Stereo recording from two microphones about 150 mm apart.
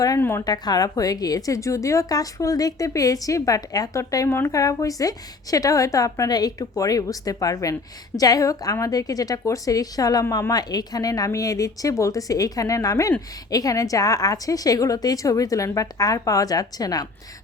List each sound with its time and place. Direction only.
0.0 s a woman's voice: 20° left (ahead or behind)